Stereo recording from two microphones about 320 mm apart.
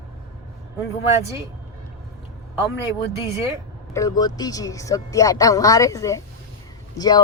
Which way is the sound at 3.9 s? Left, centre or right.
Centre.